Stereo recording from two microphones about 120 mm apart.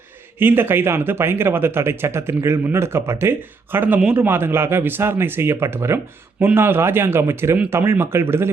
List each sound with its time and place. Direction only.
0.3 s speech: 15° right (ahead or behind)